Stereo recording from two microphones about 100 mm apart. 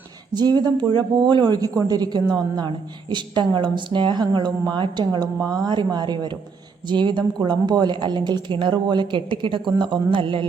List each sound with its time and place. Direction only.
0.3 s speech: 45° right (ahead or behind)